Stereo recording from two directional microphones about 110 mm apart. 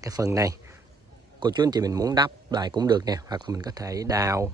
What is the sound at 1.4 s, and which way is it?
Speech, 40° right (ahead or behind).